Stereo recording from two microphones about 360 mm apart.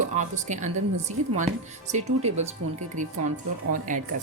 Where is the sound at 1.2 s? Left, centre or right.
Right.